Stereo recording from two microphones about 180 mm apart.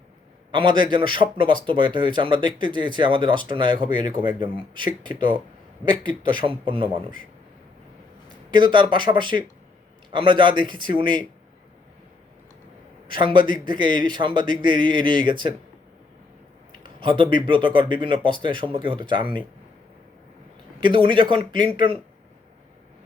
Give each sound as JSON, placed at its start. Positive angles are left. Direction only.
{"t": 0.5, "sound": "a man's voice", "side_deg": -25}
{"t": 8.4, "sound": "a man's voice", "side_deg": -25}
{"t": 13.1, "sound": "a man's voice", "side_deg": -25}
{"t": 17.0, "sound": "a man's voice", "side_deg": -25}
{"t": 20.8, "sound": "a man's voice", "side_deg": -25}